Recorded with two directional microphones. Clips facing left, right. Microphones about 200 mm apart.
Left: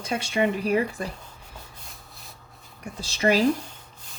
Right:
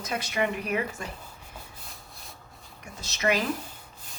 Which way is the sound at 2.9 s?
30° left (ahead or behind).